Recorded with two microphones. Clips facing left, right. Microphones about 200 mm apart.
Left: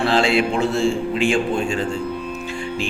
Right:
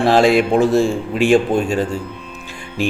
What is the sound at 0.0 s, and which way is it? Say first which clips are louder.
A man's voice: right 5 dB; 45° right (ahead or behind).